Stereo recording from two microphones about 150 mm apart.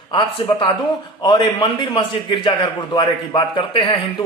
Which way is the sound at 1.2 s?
30° left (ahead or behind).